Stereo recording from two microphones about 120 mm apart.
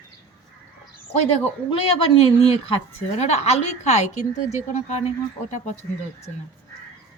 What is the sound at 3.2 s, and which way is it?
A woman's voice, 60° left (ahead or behind).